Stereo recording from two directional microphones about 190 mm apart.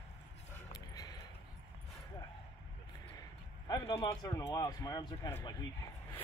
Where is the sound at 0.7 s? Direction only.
20° left (ahead or behind).